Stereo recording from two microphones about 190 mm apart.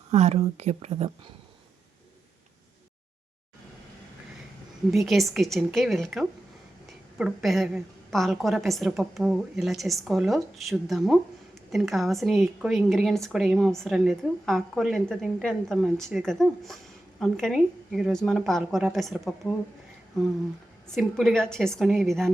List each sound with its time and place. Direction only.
0.1 s speech: 35° right (ahead or behind)
4.9 s a woman's voice: centre (ahead or behind)
20.8 s a woman's voice: centre (ahead or behind)